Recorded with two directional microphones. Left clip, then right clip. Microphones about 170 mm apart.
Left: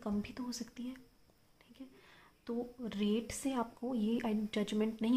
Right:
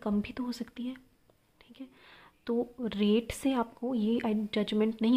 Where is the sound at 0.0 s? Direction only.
30° right (ahead or behind).